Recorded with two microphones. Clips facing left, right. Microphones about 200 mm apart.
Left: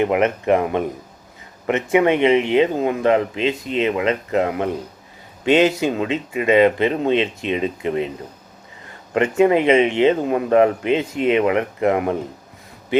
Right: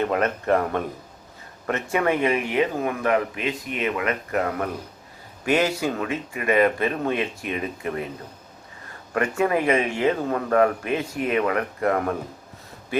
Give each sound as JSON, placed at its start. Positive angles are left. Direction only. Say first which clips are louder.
{"t": 0.0, "sound": "speech", "louder": "left 5 dB", "side_deg": 15}
{"t": 9.1, "sound": "speech", "louder": "left 7 dB", "side_deg": 20}